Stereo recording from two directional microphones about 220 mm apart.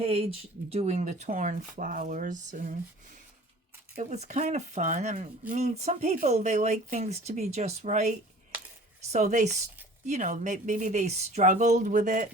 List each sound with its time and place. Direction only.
0.0 s speech: 25° right (ahead or behind)
3.9 s speech: 30° right (ahead or behind)
9.1 s speech: 30° right (ahead or behind)